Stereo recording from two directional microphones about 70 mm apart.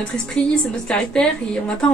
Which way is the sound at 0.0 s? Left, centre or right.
Centre.